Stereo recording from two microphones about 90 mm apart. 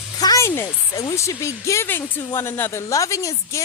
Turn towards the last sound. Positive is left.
turn(degrees=35)  # may be behind; listen again after turning